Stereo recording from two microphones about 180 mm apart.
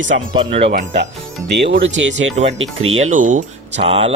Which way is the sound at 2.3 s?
40° right (ahead or behind).